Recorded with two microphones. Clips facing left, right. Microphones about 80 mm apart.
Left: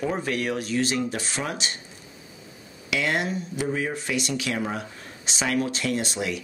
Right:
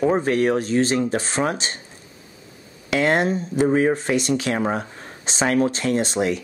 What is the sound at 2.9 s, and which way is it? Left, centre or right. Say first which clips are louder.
Speech: right 7 dB; right.